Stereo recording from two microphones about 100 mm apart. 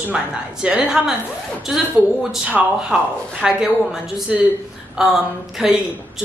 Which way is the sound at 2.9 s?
5° right (ahead or behind).